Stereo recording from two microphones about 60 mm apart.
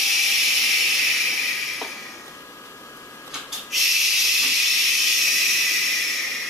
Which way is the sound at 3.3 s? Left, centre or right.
Centre.